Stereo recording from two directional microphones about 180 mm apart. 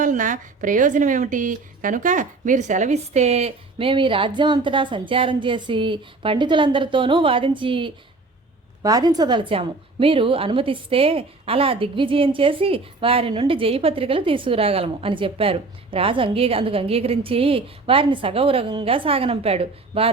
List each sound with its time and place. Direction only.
0.0 s a woman's voice: 45° right (ahead or behind)